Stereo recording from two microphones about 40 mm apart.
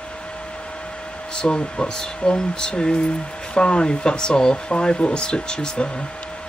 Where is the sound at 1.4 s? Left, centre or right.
Left.